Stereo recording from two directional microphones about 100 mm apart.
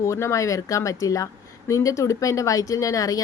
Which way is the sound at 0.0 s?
30° left (ahead or behind).